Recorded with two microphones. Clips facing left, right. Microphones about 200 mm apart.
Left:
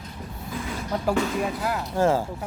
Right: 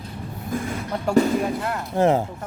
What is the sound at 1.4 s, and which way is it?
Speech, centre (ahead or behind).